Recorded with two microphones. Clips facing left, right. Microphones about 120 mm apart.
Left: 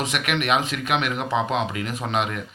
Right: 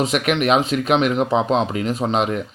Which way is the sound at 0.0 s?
35° right (ahead or behind).